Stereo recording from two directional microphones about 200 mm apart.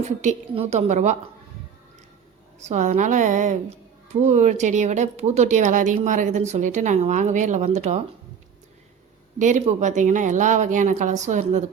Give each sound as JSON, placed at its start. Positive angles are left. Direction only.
{"t": 0.2, "sound": "a woman's voice", "side_deg": -30}
{"t": 2.6, "sound": "a woman's voice", "side_deg": -35}
{"t": 9.4, "sound": "a woman's voice", "side_deg": -40}